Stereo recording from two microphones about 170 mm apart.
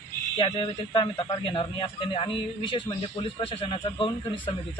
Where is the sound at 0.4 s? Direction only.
30° left (ahead or behind).